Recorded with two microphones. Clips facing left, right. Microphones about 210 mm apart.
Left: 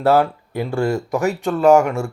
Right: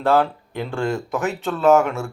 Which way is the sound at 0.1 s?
10° left (ahead or behind).